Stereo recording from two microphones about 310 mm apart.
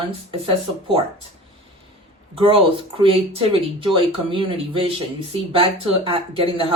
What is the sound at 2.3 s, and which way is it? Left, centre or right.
Speech, centre.